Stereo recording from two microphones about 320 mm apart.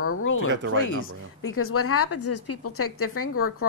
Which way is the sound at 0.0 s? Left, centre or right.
Left.